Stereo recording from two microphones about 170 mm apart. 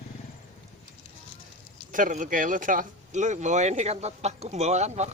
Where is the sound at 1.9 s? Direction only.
50° right (ahead or behind).